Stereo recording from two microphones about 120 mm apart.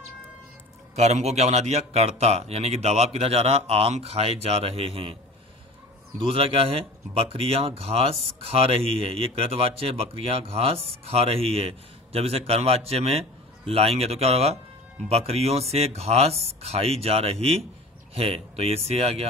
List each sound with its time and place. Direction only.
0.9 s speech: 65° right (ahead or behind); by 5.1 s 50° right (ahead or behind)
6.2 s speech: 50° right (ahead or behind)